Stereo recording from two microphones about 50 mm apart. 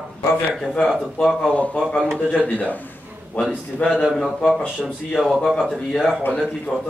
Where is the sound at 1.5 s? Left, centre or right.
Left.